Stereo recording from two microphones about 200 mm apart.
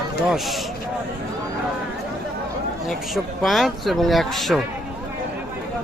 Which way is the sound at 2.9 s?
Centre (ahead or behind).